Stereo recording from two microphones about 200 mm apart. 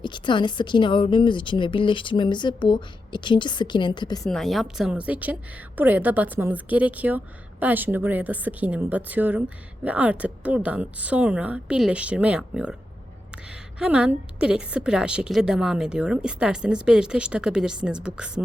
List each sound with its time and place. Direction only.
0.0 s a woman's voice: 25° left (ahead or behind)
4.3 s a woman's voice: centre (ahead or behind)